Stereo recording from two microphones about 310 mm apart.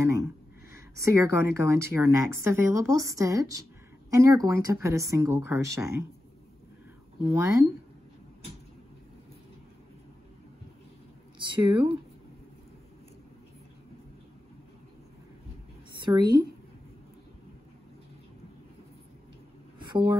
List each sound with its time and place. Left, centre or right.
1.1 s speech: centre
7.2 s speech: centre
11.3 s speech: centre
15.9 s a woman's voice: centre
19.8 s a sound: centre